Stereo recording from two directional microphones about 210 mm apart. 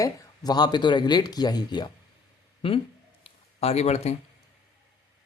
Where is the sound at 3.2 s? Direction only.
30° left (ahead or behind).